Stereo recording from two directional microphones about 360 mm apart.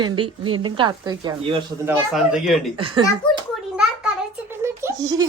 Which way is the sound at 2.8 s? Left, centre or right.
Centre.